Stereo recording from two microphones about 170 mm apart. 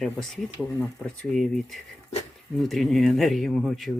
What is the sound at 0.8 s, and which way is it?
Speech, 10° left (ahead or behind).